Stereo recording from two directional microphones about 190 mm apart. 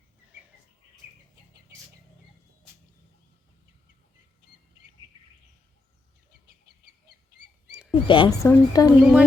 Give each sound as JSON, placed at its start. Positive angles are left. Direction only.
{"t": 7.7, "sound": "a sound", "side_deg": -5}
{"t": 8.0, "sound": "speech", "side_deg": 25}
{"t": 9.0, "sound": "speech", "side_deg": -5}